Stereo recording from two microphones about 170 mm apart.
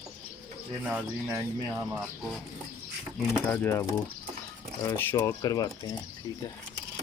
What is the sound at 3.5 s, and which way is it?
Speech, 10° left (ahead or behind).